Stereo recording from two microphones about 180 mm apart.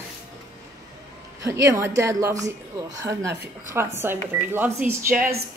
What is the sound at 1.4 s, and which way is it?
Speech, 15° right (ahead or behind).